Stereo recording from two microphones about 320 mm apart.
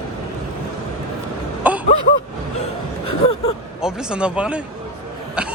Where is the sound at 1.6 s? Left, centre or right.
Centre.